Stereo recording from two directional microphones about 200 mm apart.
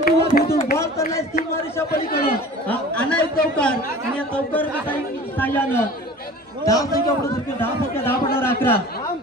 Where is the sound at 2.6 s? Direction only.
5° left (ahead or behind).